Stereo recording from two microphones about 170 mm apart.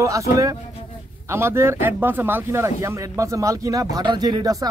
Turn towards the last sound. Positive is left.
turn(degrees=-20)  # may be behind; listen again after turning